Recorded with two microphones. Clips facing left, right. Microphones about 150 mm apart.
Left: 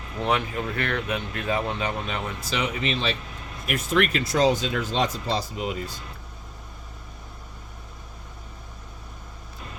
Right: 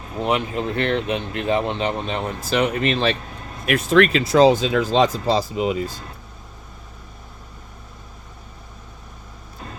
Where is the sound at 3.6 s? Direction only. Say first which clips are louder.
Right 7 dB; 90° right.